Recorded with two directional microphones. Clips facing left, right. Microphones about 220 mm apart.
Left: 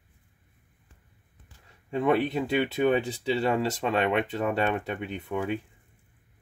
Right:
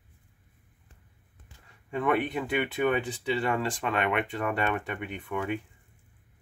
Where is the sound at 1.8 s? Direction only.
30° left (ahead or behind).